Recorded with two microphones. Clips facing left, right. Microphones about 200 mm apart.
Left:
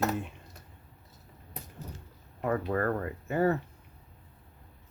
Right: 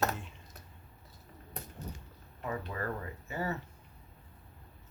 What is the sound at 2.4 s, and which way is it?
Speech, 55° left (ahead or behind).